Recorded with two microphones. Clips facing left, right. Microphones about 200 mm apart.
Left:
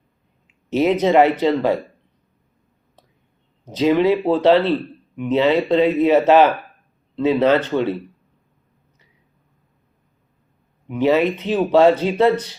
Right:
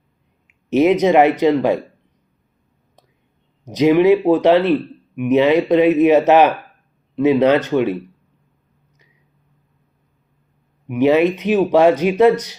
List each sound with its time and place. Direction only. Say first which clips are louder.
0.7 s speech: right 3 dB; 15° right (ahead or behind)
3.8 s speech: right 4 dB; 15° right (ahead or behind)
10.8 s speech: right 3 dB; 15° right (ahead or behind)